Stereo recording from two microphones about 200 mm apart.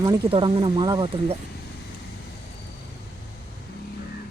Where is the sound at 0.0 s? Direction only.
25° right (ahead or behind).